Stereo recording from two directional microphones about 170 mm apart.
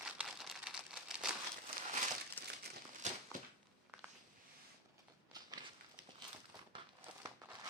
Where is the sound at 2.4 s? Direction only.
10° left (ahead or behind).